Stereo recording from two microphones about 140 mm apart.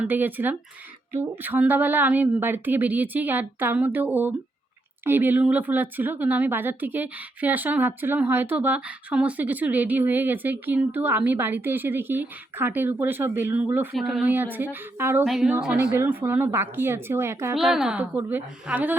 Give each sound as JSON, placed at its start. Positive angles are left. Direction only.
{"t": 0.0, "sound": "speech", "side_deg": -15}
{"t": 13.9, "sound": "speech", "side_deg": 0}
{"t": 15.2, "sound": "a sound", "side_deg": 0}
{"t": 16.0, "sound": "speech", "side_deg": -15}